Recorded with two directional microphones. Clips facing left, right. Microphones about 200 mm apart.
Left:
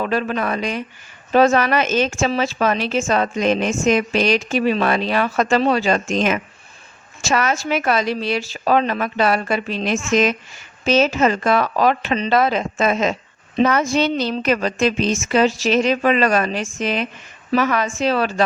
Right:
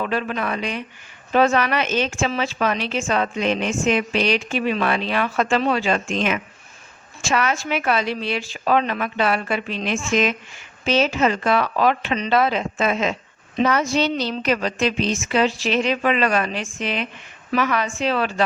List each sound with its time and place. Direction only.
0.0 s a woman's voice: 40° left (ahead or behind)
13.6 s a woman's voice: 50° left (ahead or behind)